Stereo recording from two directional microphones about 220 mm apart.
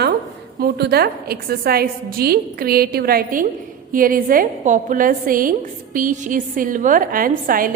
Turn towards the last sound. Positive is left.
turn(degrees=-40)  # may be behind; listen again after turning